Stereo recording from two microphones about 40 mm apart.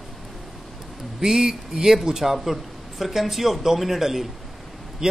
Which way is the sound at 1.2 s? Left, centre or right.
Centre.